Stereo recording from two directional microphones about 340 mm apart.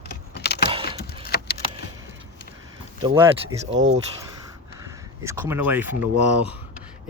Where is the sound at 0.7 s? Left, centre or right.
Centre.